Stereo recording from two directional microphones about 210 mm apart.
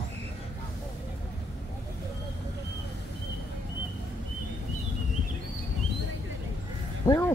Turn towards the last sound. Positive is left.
turn(degrees=15)  # may be behind; listen again after turning